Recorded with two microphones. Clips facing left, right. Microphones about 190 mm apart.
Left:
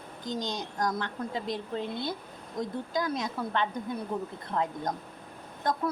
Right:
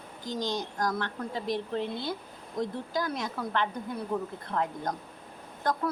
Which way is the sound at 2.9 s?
20° left (ahead or behind).